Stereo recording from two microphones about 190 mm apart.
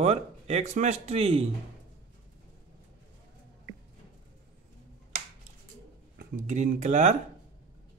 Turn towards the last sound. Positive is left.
turn(degrees=-40)  # may be behind; listen again after turning